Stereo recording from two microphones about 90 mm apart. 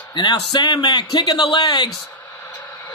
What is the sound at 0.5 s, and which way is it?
A man's voice, 50° left (ahead or behind).